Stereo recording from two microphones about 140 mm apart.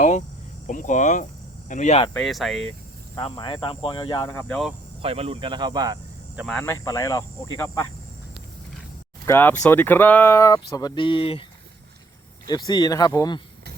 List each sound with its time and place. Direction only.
0.7 s speech: 65° left (ahead or behind)
2.1 s speech: centre (ahead or behind)
3.2 s speech: 35° left (ahead or behind)
4.2 s speech: 15° left (ahead or behind)
5.0 s speech: 45° right (ahead or behind); by 6.0 s 25° right (ahead or behind)
6.3 s speech: centre (ahead or behind)
6.6 s speech: 20° left (ahead or behind)
9.2 s speech: 15° left (ahead or behind); by 11.4 s 40° left (ahead or behind)
12.5 s speech: 30° left (ahead or behind)